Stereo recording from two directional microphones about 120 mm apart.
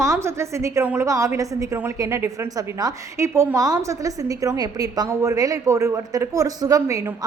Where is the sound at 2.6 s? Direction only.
30° right (ahead or behind).